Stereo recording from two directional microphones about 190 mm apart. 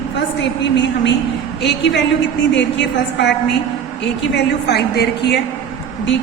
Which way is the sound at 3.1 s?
65° left (ahead or behind).